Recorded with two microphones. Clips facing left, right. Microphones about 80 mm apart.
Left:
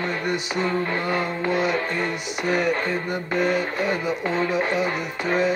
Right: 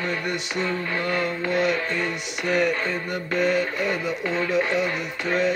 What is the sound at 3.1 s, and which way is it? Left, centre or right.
Music, centre.